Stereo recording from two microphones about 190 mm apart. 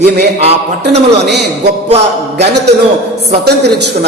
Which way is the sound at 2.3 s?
65° right (ahead or behind).